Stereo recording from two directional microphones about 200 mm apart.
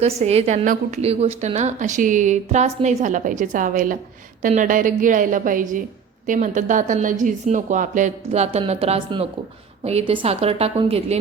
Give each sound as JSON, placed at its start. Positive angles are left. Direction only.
{"t": 0.0, "sound": "a woman's voice", "side_deg": -30}